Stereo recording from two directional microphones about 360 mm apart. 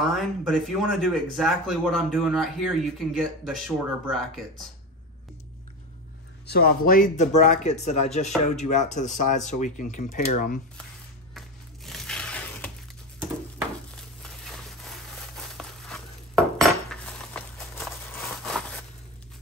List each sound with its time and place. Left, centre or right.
0.0 s speech: centre
6.4 s speech: left
11.3 s a sound: centre
15.5 s dishes: centre